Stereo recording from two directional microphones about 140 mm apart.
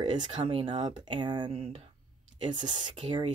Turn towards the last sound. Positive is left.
turn(degrees=-35)  # may be behind; listen again after turning